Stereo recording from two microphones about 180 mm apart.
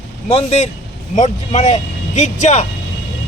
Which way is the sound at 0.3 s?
35° left (ahead or behind).